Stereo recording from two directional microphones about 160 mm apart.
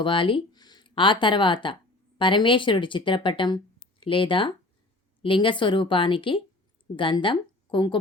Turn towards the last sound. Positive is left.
turn(degrees=30)  # may be behind; listen again after turning